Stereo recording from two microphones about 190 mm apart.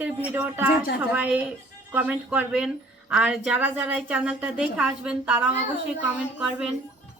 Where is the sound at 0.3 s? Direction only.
10° right (ahead or behind).